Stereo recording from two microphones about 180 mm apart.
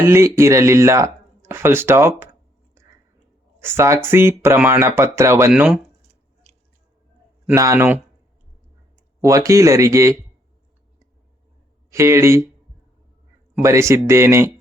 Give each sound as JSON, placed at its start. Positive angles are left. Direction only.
{"t": 0.0, "sound": "speech", "side_deg": -15}
{"t": 3.6, "sound": "speech", "side_deg": -15}
{"t": 7.4, "sound": "speech", "side_deg": -15}
{"t": 9.2, "sound": "speech", "side_deg": -15}
{"t": 11.9, "sound": "speech", "side_deg": -15}
{"t": 13.6, "sound": "speech", "side_deg": -15}